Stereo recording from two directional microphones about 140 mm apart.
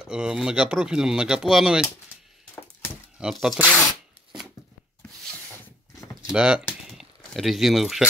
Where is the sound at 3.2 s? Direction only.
5° right (ahead or behind).